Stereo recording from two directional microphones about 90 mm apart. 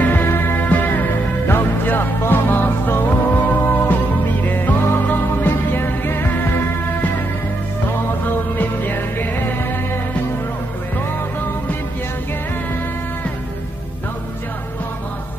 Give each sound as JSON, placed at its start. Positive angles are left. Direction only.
{"t": 0.0, "sound": "music", "side_deg": 25}
{"t": 8.3, "sound": "music", "side_deg": 20}